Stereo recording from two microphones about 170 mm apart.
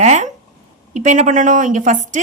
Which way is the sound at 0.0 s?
45° right (ahead or behind).